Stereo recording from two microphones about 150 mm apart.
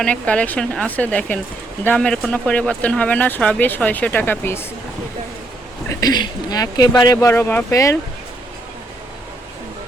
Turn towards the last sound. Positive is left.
turn(degrees=20)  # may be behind; listen again after turning